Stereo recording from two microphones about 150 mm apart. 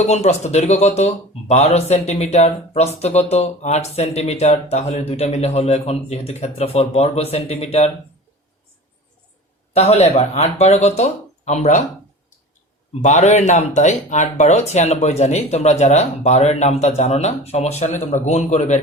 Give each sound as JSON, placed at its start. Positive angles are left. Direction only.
{"t": 0.0, "sound": "speech", "side_deg": 45}
{"t": 9.7, "sound": "speech", "side_deg": 45}
{"t": 12.9, "sound": "speech", "side_deg": 50}